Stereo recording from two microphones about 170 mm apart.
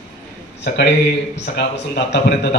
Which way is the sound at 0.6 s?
70° left (ahead or behind).